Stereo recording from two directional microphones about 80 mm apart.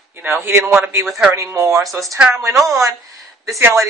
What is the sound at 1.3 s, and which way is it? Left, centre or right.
Speech, right.